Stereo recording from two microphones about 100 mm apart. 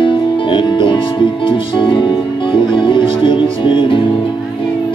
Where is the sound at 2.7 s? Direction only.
55° left (ahead or behind).